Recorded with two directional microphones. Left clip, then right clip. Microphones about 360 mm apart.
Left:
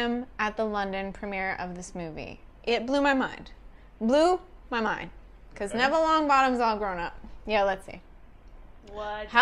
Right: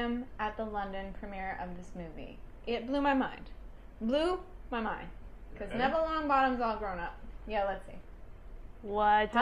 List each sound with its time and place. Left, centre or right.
0.0 s a woman's voice: left
8.9 s speech: right